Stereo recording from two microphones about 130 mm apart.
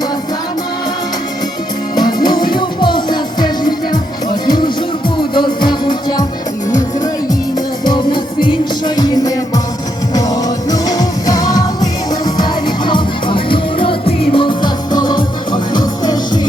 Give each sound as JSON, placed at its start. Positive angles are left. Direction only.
{"t": 2.1, "sound": "music", "side_deg": 35}
{"t": 5.3, "sound": "music", "side_deg": 35}
{"t": 7.9, "sound": "music", "side_deg": 35}